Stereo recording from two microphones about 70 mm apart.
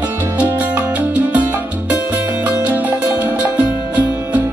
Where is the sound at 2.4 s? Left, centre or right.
Right.